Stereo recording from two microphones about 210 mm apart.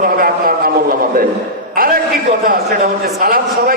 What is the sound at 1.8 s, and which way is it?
A man's voice, 45° right (ahead or behind).